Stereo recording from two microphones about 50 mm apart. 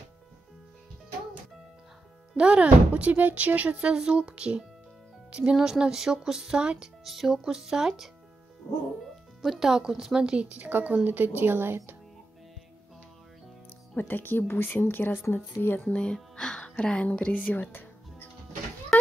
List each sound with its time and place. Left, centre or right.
2.3 s speech: centre
7.1 s speech: centre
8.6 s speech: left
9.4 s speech: centre; by 11.9 s right
13.9 s speech: left
15.9 s speech: centre; by 17.6 s left